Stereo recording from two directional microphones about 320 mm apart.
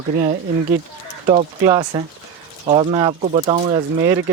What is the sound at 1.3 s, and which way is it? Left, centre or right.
Speech, centre.